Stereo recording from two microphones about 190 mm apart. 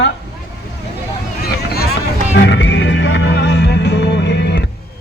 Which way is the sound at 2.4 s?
70° left (ahead or behind).